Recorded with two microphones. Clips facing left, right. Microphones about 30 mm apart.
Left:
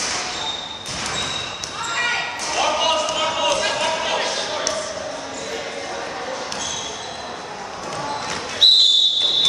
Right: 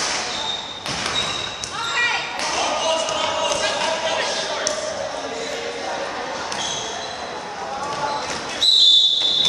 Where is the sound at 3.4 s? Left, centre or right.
Centre.